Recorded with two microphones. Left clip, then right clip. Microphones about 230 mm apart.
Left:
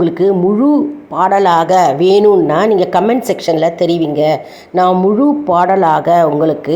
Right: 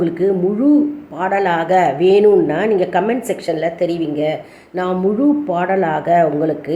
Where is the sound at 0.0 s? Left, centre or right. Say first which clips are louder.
Left 5 dB; left.